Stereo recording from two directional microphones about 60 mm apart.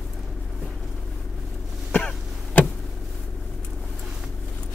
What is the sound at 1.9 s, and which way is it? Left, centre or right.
Cough, centre.